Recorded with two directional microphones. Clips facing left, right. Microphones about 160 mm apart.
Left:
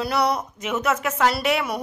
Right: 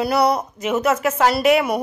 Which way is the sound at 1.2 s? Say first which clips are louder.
Right 6 dB; 45° right (ahead or behind).